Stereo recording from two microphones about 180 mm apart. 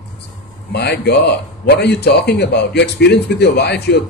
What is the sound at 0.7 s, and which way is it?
A man's voice, 65° left (ahead or behind).